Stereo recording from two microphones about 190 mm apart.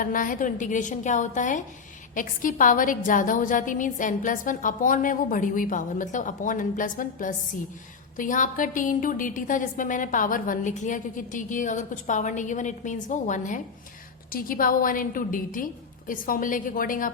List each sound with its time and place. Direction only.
0.0 s a woman's voice: 45° left (ahead or behind)